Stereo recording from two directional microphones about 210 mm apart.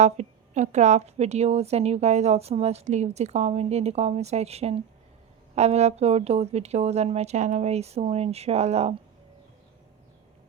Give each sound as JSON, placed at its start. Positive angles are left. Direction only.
{"t": 0.0, "sound": "a woman's voice", "side_deg": -35}